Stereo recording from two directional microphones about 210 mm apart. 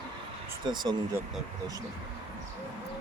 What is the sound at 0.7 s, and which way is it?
Speech, 20° right (ahead or behind).